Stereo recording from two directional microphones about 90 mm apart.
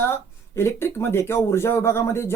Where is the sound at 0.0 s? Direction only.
25° left (ahead or behind).